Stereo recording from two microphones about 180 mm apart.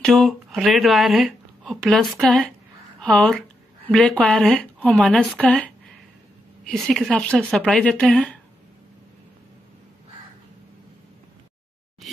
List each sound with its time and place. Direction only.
0.0 s a woman's voice: centre (ahead or behind)